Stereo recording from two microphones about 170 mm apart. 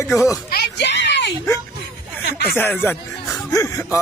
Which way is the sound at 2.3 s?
10° left (ahead or behind).